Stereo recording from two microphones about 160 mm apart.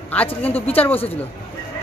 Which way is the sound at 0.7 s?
10° left (ahead or behind).